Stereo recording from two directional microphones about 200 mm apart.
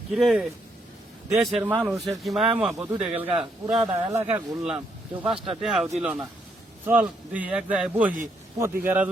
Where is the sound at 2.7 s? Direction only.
15° right (ahead or behind).